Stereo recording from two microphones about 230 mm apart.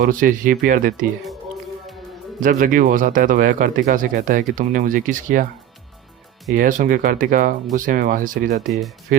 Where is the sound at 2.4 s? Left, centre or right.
Right.